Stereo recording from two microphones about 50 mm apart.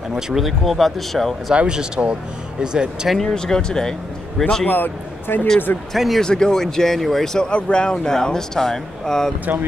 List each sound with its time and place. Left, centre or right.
0.3 s speech: centre
1.5 s speech: centre
3.1 s speech: centre
4.6 s speech: left
5.9 s speech: centre
6.2 s speech: centre
7.3 s speech: centre